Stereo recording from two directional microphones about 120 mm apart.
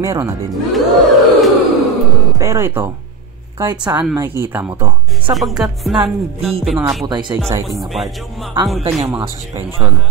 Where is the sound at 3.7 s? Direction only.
10° right (ahead or behind).